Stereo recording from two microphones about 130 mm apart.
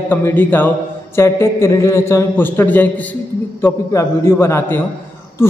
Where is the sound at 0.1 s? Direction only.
15° left (ahead or behind).